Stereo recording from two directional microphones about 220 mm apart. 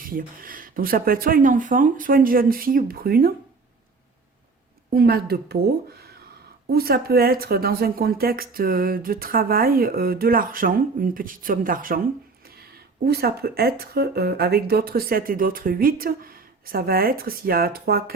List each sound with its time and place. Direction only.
0.0 s speech: 40° right (ahead or behind)
4.9 s speech: 45° right (ahead or behind)
13.1 s speech: 45° right (ahead or behind)